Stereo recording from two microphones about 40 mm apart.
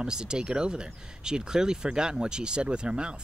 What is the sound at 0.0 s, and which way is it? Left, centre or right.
Speech, centre.